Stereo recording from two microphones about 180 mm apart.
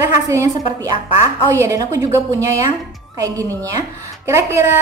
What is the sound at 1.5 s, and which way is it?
A woman's voice, 15° right (ahead or behind).